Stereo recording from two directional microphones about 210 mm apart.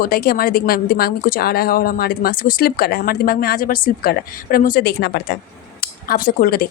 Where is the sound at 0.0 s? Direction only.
45° left (ahead or behind).